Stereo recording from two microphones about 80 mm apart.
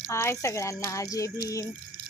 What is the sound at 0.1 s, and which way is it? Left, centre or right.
Speech, left.